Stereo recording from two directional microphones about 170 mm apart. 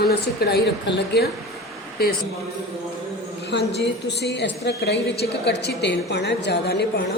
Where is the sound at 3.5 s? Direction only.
85° left.